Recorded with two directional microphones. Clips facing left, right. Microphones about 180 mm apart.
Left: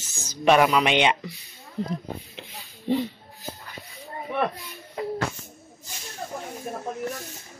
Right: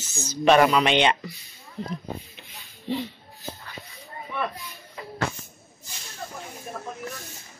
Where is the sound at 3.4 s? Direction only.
15° left (ahead or behind).